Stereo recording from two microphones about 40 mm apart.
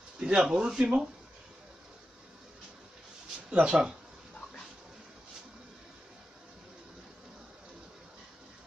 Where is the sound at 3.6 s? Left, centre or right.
Centre.